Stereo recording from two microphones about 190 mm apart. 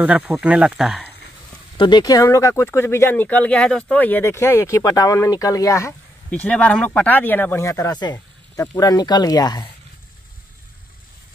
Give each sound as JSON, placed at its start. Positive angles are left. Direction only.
{"t": 0.0, "sound": "speech", "side_deg": -5}
{"t": 1.8, "sound": "speech", "side_deg": 25}